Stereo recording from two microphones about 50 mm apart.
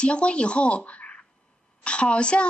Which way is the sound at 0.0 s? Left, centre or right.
Left.